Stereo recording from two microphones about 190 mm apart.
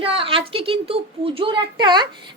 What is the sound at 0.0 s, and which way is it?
A woman's voice, 30° right (ahead or behind).